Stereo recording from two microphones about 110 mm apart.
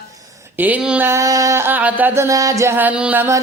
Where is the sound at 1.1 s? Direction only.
30° right (ahead or behind); by 3.3 s 15° right (ahead or behind).